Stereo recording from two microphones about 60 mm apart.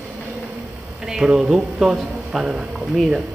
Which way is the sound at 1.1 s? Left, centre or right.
Centre.